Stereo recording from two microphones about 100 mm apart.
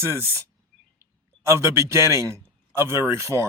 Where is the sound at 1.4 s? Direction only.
30° right (ahead or behind).